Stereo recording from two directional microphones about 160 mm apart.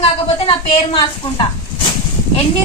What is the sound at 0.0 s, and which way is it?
Speech, 35° left (ahead or behind).